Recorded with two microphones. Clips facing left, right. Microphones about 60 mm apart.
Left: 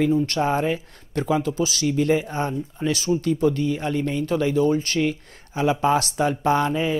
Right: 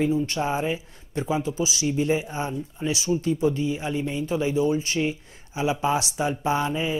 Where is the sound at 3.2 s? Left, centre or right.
Left.